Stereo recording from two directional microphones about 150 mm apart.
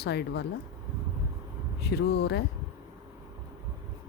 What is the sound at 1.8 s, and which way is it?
Speech, 90° left.